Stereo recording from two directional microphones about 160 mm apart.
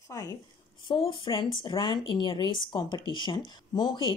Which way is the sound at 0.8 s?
30° left (ahead or behind).